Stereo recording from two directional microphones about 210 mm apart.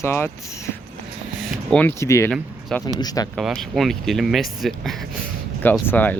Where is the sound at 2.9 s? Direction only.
20° left (ahead or behind).